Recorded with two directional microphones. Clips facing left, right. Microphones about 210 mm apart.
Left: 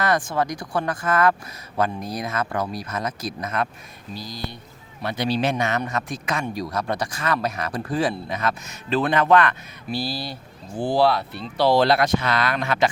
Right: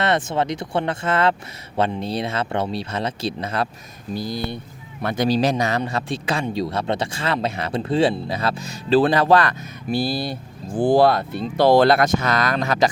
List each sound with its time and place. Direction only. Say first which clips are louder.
0.0 s speech: right 2 dB; 25° right (ahead or behind)
4.1 s speech: right 7 dB; 55° right (ahead or behind)
5.0 s speech: right 4 dB; 45° right (ahead or behind)
9.9 s speech: right 5 dB; 50° right (ahead or behind)